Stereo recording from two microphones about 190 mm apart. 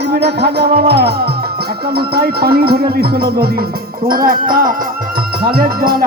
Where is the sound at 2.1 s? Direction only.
55° right (ahead or behind).